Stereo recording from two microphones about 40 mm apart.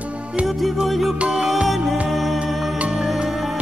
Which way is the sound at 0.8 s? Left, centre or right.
Centre.